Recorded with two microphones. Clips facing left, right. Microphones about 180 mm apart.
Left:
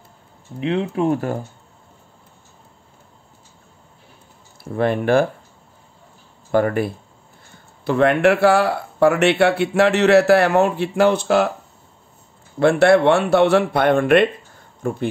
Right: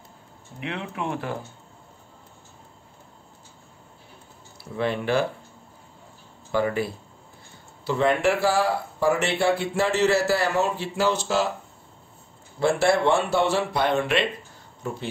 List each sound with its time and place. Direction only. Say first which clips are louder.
0.6 s speech: left 11 dB; 30° left (ahead or behind)
4.6 s speech: left 7 dB; 50° left (ahead or behind)
6.5 s speech: left 6 dB; 55° left (ahead or behind)
12.5 s speech: left 7 dB; 65° left (ahead or behind)